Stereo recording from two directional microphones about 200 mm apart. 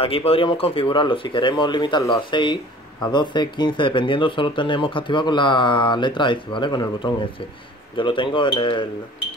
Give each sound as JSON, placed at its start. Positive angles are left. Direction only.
{"t": 0.0, "sound": "speech", "side_deg": 30}